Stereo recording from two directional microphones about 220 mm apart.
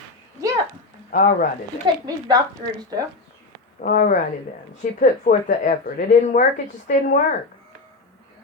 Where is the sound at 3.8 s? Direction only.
40° left (ahead or behind).